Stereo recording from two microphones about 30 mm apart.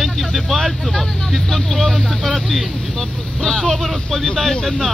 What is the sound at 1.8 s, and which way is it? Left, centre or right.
Speech, centre.